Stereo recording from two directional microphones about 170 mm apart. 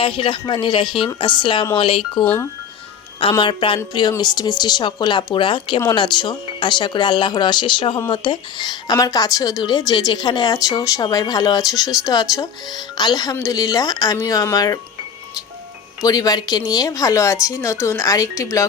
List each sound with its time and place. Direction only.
0.0 s speech: 30° left (ahead or behind)
2.2 s speech: 10° left (ahead or behind)
3.2 s speech: 30° left (ahead or behind)
16.0 s speech: 20° left (ahead or behind)